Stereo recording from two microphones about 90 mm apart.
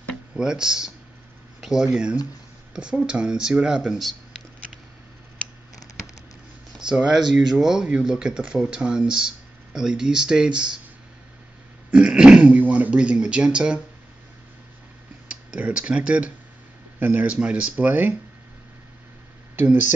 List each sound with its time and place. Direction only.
0.4 s speech: 5° right (ahead or behind)
6.8 s speech: 10° right (ahead or behind)
11.9 s speech: 15° right (ahead or behind)
15.2 s speech: 15° right (ahead or behind)
19.5 s speech: 20° right (ahead or behind)